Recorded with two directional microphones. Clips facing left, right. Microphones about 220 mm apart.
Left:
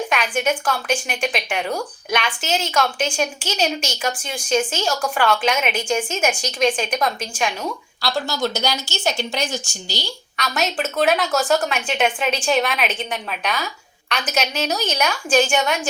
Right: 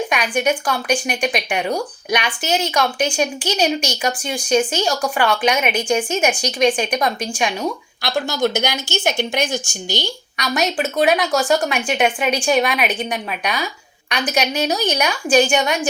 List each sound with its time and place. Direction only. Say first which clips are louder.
0.1 s speech: right 2 dB; 15° right (ahead or behind)